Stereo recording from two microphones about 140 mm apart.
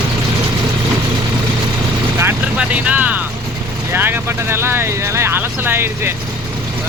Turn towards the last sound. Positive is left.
turn(degrees=-15)  # may be behind; listen again after turning